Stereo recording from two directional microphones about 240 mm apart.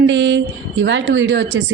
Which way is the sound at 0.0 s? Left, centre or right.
Right.